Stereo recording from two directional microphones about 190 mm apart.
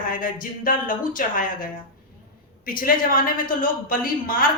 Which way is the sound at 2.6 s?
50° left (ahead or behind).